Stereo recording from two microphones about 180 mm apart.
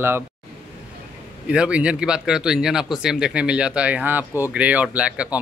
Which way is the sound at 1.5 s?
5° right (ahead or behind).